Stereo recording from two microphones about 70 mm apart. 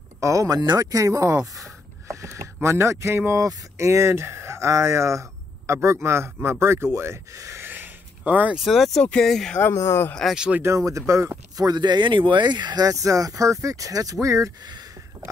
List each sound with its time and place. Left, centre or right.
0.2 s speech: right
0.9 s speech: right
2.0 s vehicle: right
3.4 s speech: right
7.6 s gasp: right
8.3 s speech: right
8.5 s speech: centre
9.6 s speech: left
10.3 s speech: centre
10.6 s speech: right
11.5 s speech: right